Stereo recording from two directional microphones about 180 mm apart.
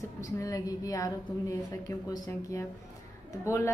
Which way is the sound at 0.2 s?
20° left (ahead or behind).